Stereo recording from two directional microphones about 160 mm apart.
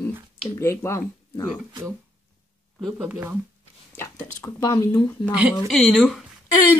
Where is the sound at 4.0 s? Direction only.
15° left (ahead or behind).